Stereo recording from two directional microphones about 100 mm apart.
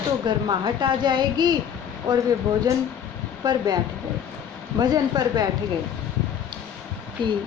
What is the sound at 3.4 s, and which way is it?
Speech, 45° right (ahead or behind).